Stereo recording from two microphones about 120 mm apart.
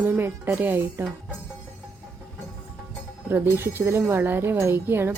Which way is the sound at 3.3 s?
20° right (ahead or behind).